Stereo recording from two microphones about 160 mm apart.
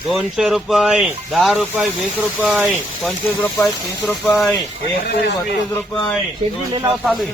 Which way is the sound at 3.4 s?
10° left (ahead or behind).